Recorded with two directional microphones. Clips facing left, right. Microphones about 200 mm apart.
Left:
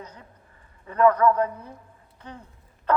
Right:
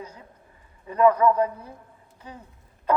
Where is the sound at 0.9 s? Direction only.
10° right (ahead or behind).